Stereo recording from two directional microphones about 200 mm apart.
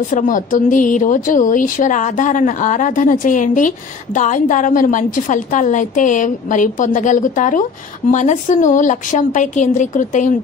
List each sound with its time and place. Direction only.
0.1 s a woman's voice: 40° left (ahead or behind)